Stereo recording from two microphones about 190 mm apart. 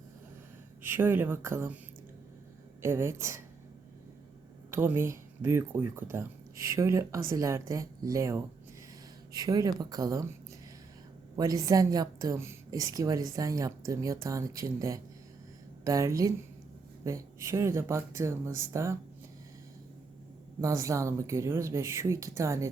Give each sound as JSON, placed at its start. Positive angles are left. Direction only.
{"t": 0.8, "sound": "a woman's voice", "side_deg": -10}
{"t": 2.8, "sound": "a woman's voice", "side_deg": -15}
{"t": 4.7, "sound": "a woman's voice", "side_deg": -10}
{"t": 11.3, "sound": "a woman's voice", "side_deg": -20}
{"t": 20.6, "sound": "a woman's voice", "side_deg": -15}